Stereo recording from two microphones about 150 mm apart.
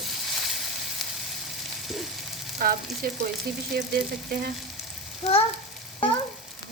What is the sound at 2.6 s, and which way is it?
Frying, 75° right (ahead or behind).